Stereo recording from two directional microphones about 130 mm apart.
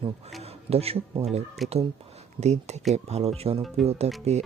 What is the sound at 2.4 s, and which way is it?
Speech, 60° right (ahead or behind).